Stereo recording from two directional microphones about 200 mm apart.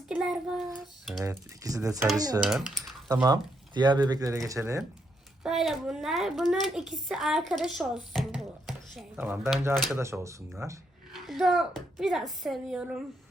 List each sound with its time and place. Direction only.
0.1 s a woman's voice: centre (ahead or behind)
1.2 s speech: 15° right (ahead or behind)
2.4 s a woman's voice: 5° right (ahead or behind)
3.2 s speech: 20° right (ahead or behind)
5.4 s a woman's voice: centre (ahead or behind)
11.1 s speech: centre (ahead or behind)